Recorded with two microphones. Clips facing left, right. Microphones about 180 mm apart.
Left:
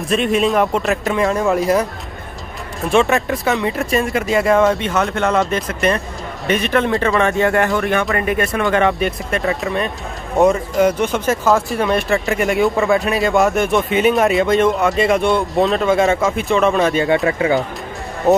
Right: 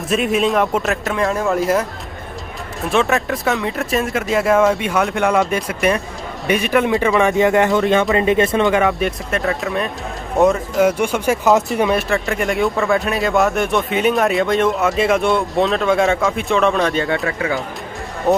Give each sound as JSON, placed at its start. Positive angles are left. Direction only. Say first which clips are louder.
{"t": 0.1, "sound": "speech", "louder": "left 1 dB", "side_deg": 0}
{"t": 2.9, "sound": "speech", "louder": "left 2 dB", "side_deg": 0}
{"t": 7.2, "sound": "speech", "louder": "right 3 dB", "side_deg": -15}
{"t": 8.7, "sound": "speech", "louder": "left 1 dB", "side_deg": 0}
{"t": 11.9, "sound": "speech", "louder": "left 1 dB", "side_deg": 0}
{"t": 17.0, "sound": "speech", "louder": "left 4 dB", "side_deg": 20}
{"t": 18.3, "sound": "speech", "louder": "left 3 dB", "side_deg": 5}